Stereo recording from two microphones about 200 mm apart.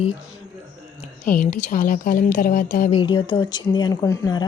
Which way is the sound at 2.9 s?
25° left (ahead or behind).